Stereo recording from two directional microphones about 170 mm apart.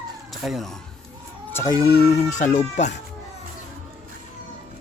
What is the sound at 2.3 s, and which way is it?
Speech, 45° left (ahead or behind).